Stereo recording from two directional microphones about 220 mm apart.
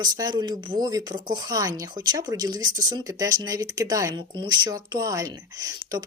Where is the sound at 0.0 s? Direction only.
20° right (ahead or behind).